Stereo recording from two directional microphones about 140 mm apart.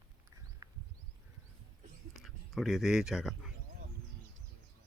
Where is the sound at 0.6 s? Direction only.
30° right (ahead or behind).